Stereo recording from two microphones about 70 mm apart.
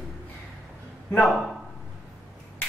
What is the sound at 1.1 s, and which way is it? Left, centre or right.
Speech, centre.